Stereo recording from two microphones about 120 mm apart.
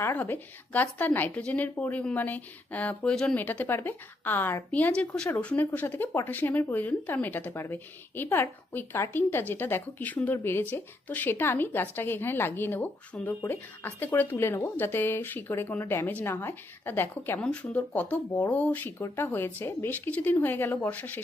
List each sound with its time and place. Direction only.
0.0 s a woman's voice: 15° left (ahead or behind)